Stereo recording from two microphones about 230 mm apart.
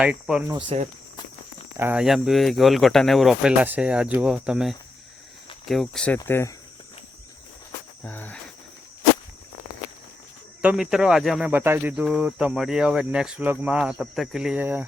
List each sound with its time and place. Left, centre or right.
0.0 s speech: centre
0.5 s speech: right
1.8 s speech: centre
8.0 s speech: centre
10.6 s speech: centre